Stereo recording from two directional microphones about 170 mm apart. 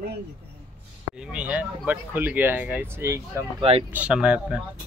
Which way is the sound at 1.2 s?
5° right (ahead or behind).